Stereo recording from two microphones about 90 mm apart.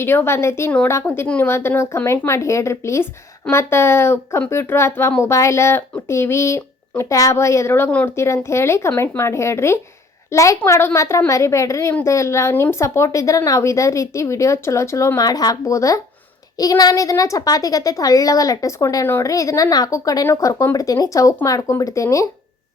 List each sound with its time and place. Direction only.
0.0 s speech: 25° left (ahead or behind)
7.9 s speech: 15° left (ahead or behind)
8.1 s speech: 30° left (ahead or behind)